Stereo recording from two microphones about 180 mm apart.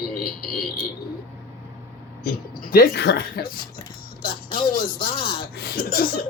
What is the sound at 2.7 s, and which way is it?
Speech, 60° left (ahead or behind).